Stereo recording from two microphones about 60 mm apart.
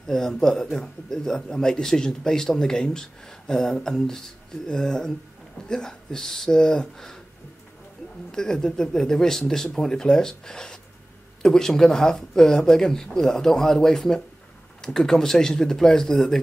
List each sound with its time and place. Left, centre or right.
0.0 s speech: centre
8.3 s speech: centre